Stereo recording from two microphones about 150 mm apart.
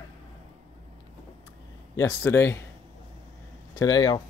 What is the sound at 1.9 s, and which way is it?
Speech, 20° left (ahead or behind).